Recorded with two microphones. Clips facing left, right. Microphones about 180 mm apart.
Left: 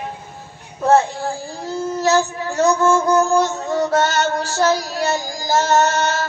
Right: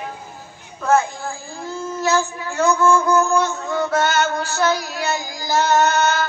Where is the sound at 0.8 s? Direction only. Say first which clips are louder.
Left 3 dB; 35° left (ahead or behind).